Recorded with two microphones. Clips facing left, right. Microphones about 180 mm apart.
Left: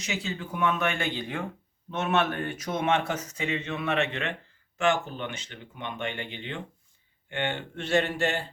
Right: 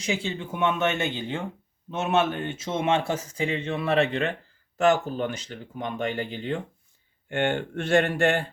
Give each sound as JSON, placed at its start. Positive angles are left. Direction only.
{"t": 0.0, "sound": "a man's voice", "side_deg": -30}